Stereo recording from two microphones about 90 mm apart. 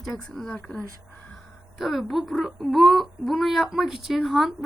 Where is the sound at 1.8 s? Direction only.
Centre (ahead or behind).